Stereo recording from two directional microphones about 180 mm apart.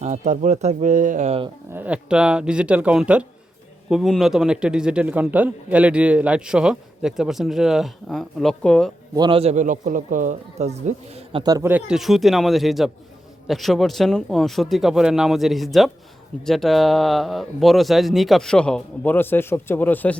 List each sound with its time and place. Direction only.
0.0 s a man's voice: 40° right (ahead or behind)
1.7 s a man's voice: 10° right (ahead or behind)
9.1 s a man's voice: 25° right (ahead or behind)
11.7 s a man's voice: 5° right (ahead or behind)